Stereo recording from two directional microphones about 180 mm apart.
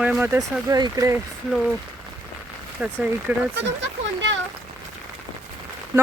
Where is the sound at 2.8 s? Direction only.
5° right (ahead or behind).